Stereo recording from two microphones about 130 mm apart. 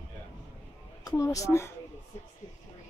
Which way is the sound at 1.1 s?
25° left (ahead or behind).